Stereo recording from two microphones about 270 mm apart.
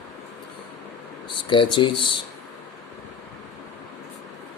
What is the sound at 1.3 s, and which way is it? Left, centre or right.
Speech, centre.